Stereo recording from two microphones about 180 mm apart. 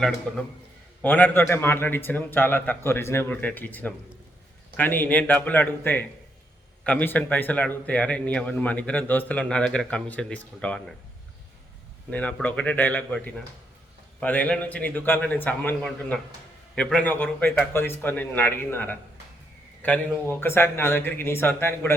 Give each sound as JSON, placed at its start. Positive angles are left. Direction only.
{"t": 0.3, "sound": "a man's voice", "side_deg": 5}
{"t": 12.1, "sound": "a man's voice", "side_deg": 10}